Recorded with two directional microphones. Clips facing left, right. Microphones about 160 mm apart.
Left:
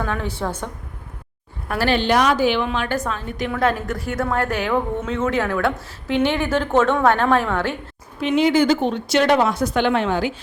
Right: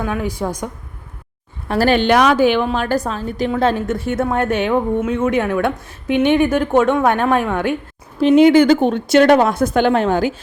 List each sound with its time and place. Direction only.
0.0 s a woman's voice: 10° right (ahead or behind)
1.8 s a woman's voice: 55° right (ahead or behind)
2.6 s a woman's voice: 40° right (ahead or behind); by 4.8 s 20° right (ahead or behind)
4.9 s a woman's voice: 10° right (ahead or behind)
8.4 s a woman's voice: 55° right (ahead or behind)